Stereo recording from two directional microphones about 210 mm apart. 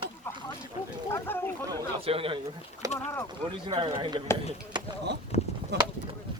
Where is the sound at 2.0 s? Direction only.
25° right (ahead or behind).